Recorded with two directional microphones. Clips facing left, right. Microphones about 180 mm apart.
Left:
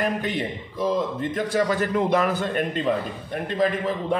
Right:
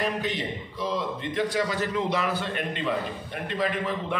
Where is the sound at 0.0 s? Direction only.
55° left (ahead or behind).